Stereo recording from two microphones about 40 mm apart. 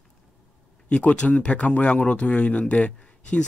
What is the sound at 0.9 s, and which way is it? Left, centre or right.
Speech, left.